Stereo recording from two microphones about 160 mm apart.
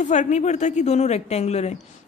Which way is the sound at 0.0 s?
50° left (ahead or behind).